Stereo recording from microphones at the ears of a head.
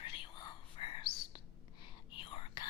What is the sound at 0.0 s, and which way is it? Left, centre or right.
Whispering, left.